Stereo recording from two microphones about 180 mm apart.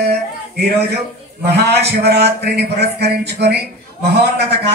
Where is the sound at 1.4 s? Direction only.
65° right (ahead or behind).